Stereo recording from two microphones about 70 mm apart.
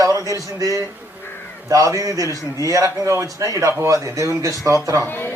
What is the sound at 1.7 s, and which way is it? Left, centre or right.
A man's voice, right.